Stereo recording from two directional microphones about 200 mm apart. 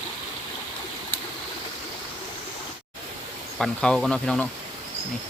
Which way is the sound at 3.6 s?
Centre (ahead or behind).